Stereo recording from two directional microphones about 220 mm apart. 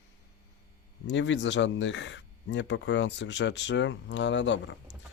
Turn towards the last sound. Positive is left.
turn(degrees=55)  # may be behind; listen again after turning